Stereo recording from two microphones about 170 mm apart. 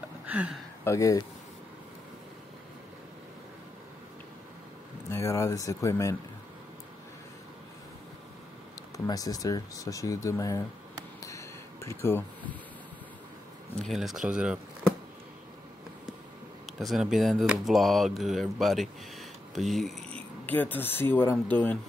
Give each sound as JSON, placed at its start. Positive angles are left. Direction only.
{"t": 0.3, "sound": "speech", "side_deg": -10}
{"t": 0.8, "sound": "speech", "side_deg": 20}
{"t": 5.1, "sound": "speech", "side_deg": 20}
{"t": 8.9, "sound": "speech", "side_deg": 20}
{"t": 11.1, "sound": "a sound", "side_deg": 20}
{"t": 13.7, "sound": "speech", "side_deg": 0}
{"t": 16.7, "sound": "speech", "side_deg": 0}